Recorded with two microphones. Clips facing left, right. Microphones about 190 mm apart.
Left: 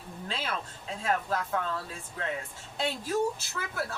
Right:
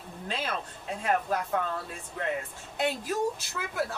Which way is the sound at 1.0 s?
15° right (ahead or behind).